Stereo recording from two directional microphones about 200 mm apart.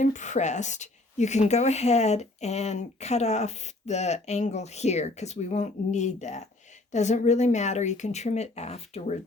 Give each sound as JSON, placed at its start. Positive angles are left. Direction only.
{"t": 0.0, "sound": "a woman's voice", "side_deg": 35}